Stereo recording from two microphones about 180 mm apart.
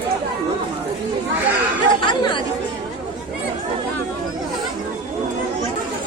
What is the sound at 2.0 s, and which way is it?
Chatter, 25° left (ahead or behind).